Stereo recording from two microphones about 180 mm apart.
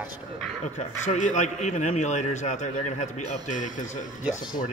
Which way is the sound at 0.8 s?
45° left (ahead or behind).